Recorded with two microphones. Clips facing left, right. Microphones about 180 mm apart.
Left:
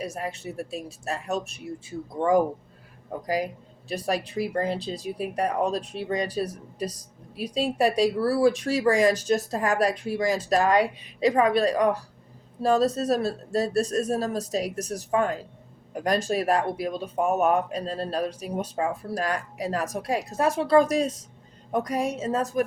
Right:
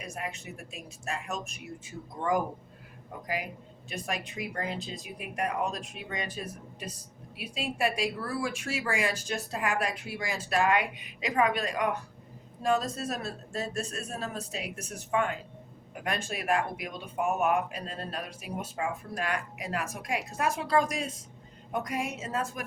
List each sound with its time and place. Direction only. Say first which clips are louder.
0.0 s speech: left 7 dB; 35° left (ahead or behind)